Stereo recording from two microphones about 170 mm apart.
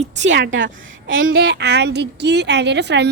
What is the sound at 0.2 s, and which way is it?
A woman's voice, 90° right.